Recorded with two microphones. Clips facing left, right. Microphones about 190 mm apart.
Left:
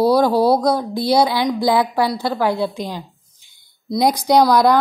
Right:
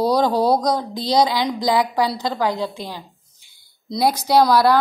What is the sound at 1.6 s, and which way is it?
Speech, 15° right (ahead or behind).